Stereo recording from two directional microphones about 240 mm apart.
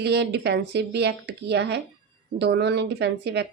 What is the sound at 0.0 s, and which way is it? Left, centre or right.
Speech, right.